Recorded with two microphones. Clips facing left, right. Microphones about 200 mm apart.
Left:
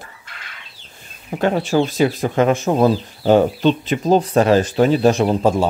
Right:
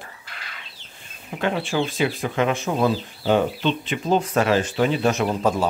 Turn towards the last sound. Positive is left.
turn(degrees=30)  # may be behind; listen again after turning